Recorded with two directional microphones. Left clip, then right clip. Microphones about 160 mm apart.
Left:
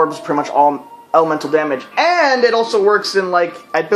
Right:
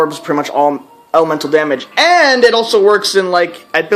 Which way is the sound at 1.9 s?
45° right (ahead or behind).